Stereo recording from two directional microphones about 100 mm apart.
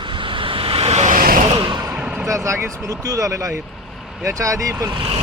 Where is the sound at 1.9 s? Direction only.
10° right (ahead or behind).